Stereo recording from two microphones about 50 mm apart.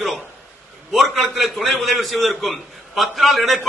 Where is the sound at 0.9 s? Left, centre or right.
Centre.